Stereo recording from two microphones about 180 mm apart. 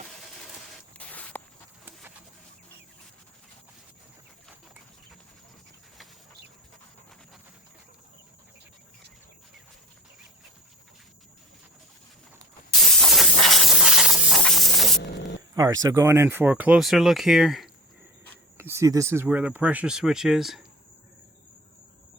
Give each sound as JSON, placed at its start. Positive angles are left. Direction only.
{"t": 0.9, "sound": "walk", "side_deg": 10}
{"t": 12.8, "sound": "steam", "side_deg": 0}
{"t": 15.5, "sound": "speech", "side_deg": -20}
{"t": 18.5, "sound": "speech", "side_deg": -15}